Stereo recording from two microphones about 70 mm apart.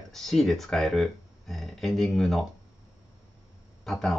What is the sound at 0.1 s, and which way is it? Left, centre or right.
Speech, centre.